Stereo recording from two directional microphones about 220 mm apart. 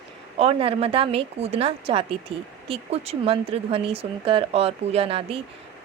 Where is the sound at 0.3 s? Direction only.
25° right (ahead or behind).